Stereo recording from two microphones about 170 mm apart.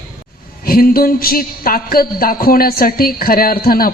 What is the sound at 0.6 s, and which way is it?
A woman's voice, 60° left (ahead or behind).